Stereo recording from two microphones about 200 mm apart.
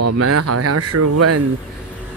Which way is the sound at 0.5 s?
90° right.